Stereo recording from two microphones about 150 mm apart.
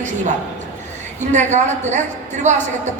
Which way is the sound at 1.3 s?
50° right (ahead or behind).